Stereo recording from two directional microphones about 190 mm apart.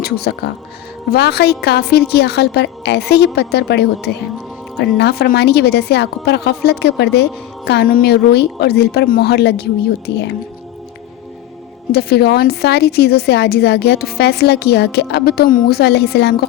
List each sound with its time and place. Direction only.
0.0 s a woman's voice: 60° left (ahead or behind)
11.9 s a woman's voice: 55° left (ahead or behind)